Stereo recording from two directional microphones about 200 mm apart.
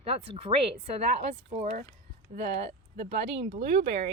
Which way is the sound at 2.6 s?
55° right (ahead or behind).